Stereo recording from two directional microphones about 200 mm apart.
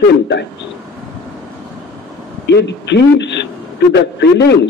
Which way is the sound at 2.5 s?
60° left (ahead or behind).